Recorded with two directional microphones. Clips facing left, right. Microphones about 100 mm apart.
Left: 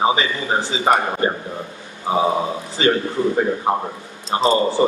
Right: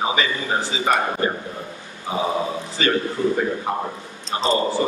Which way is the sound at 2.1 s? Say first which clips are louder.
Left 6 dB; 30° left (ahead or behind).